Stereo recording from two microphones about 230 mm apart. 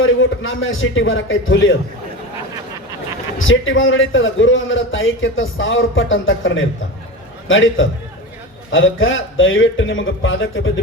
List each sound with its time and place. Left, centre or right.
0.0 s a man's voice: left
3.3 s a man's voice: left